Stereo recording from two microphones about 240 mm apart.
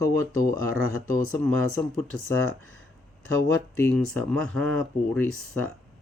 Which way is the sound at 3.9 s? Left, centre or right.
Centre.